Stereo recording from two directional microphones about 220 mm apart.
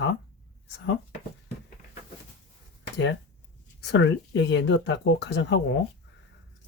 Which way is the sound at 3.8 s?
55° left (ahead or behind).